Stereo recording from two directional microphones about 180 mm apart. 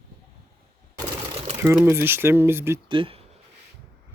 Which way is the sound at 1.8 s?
10° right (ahead or behind).